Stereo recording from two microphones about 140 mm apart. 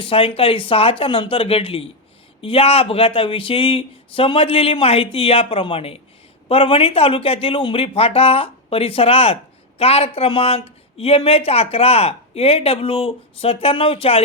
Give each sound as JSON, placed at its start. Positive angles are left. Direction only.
{"t": 0.0, "sound": "speech", "side_deg": 40}